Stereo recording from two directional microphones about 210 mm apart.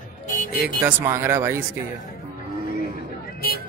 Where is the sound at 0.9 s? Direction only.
10° right (ahead or behind).